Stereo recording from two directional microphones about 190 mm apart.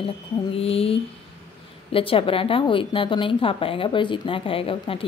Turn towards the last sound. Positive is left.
turn(degrees=30)  # may be behind; listen again after turning